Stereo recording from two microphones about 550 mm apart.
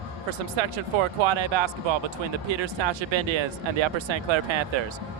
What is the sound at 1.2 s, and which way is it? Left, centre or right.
Speech, right.